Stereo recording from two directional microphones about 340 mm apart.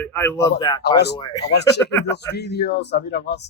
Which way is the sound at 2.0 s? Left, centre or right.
Left.